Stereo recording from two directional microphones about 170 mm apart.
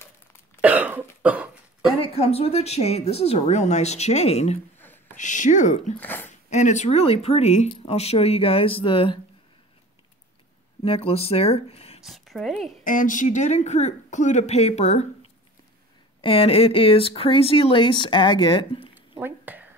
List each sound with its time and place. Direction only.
0.6 s cough: 10° right (ahead or behind)
2.0 s speech: 35° left (ahead or behind)
4.7 s a sound: 10° left (ahead or behind)
5.1 s speech: 45° left (ahead or behind)
5.9 s speech: 10° left (ahead or behind)
6.5 s speech: 45° left (ahead or behind)
10.8 s speech: 35° left (ahead or behind)
12.0 s speech: centre (ahead or behind)
12.8 s speech: 50° left (ahead or behind)
16.2 s speech: 35° left (ahead or behind)
18.9 s a sound: 10° right (ahead or behind)